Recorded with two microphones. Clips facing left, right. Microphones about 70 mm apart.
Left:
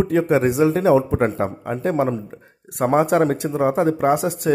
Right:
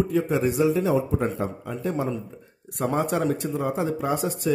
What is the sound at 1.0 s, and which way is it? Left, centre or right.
Speech, left.